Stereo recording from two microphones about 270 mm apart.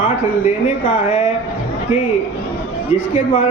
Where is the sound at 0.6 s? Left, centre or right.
Left.